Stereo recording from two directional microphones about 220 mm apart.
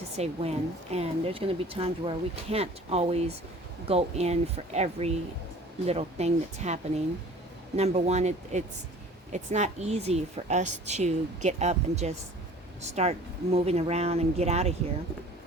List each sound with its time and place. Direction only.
0.2 s a woman's voice: 30° right (ahead or behind)
7.8 s a woman's voice: 30° right (ahead or behind)